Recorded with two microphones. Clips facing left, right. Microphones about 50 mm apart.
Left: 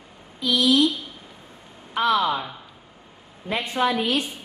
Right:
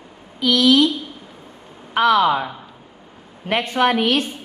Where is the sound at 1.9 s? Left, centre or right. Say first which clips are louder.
Right 6 dB; right.